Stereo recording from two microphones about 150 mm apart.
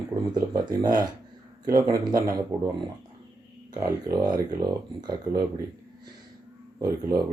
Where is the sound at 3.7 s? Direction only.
20° right (ahead or behind).